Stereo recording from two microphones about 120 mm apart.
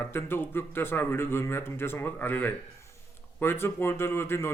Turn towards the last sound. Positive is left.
turn(degrees=20)  # may be behind; listen again after turning